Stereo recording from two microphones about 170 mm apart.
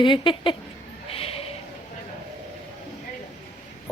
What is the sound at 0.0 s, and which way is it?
Speech, 30° left (ahead or behind).